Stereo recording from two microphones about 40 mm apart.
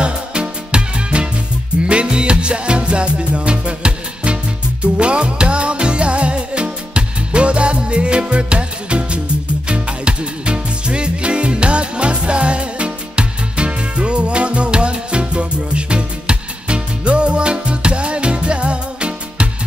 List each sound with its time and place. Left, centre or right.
0.0 s music: right